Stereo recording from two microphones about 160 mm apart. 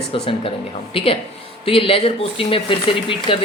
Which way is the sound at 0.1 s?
35° left (ahead or behind).